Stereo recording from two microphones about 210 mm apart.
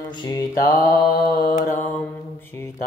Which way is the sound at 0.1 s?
20° left (ahead or behind).